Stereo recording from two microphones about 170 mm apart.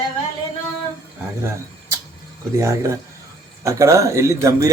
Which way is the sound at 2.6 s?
15° right (ahead or behind).